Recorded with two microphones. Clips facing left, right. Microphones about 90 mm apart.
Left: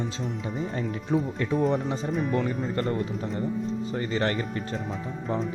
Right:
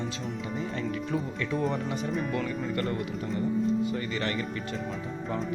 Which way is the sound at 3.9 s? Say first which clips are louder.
Left 4 dB; 35° left (ahead or behind).